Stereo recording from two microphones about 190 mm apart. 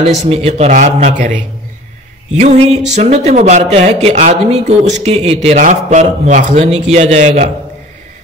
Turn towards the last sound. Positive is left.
turn(degrees=-35)  # may be behind; listen again after turning